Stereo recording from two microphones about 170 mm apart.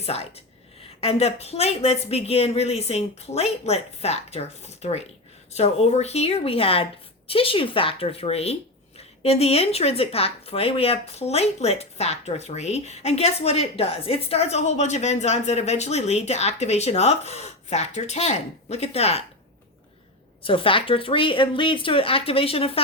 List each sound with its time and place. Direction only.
0.0 s a woman's voice: 35° left (ahead or behind)
20.4 s a woman's voice: 30° left (ahead or behind)